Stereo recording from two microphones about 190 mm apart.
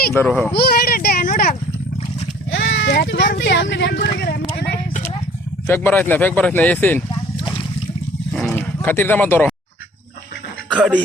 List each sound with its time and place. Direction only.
0.1 s speech: 10° left (ahead or behind)
0.5 s a sound: 55° left (ahead or behind)
2.6 s a sound: 70° left (ahead or behind)
5.6 s speech: 10° left (ahead or behind)
8.3 s roaring cats: 5° left (ahead or behind)
10.7 s music: 5° right (ahead or behind)